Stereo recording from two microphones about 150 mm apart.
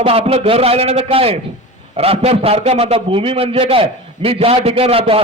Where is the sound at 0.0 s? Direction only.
40° right (ahead or behind).